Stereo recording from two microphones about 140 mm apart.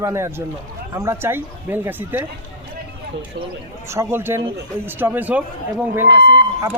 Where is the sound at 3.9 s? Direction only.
20° right (ahead or behind).